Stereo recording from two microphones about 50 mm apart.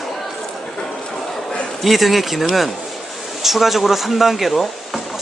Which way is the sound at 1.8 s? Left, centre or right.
Centre.